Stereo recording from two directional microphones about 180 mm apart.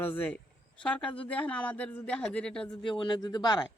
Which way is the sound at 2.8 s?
25° left (ahead or behind).